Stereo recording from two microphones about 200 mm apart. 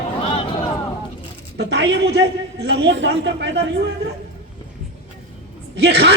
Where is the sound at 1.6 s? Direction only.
60° right (ahead or behind).